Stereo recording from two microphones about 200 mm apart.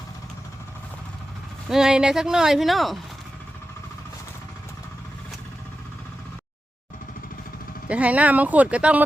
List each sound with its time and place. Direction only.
1.6 s speech: centre (ahead or behind)
7.9 s speech: 5° right (ahead or behind)